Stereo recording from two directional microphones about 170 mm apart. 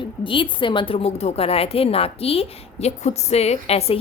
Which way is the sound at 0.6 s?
30° left (ahead or behind).